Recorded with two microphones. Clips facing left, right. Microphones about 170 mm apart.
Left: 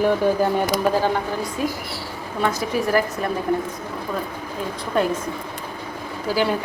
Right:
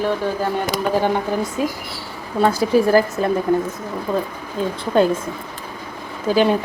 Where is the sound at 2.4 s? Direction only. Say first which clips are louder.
Right 7 dB; 30° right (ahead or behind).